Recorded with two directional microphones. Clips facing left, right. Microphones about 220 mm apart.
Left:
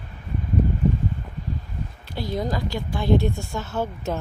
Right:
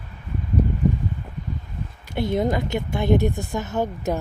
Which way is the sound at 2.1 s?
25° right (ahead or behind).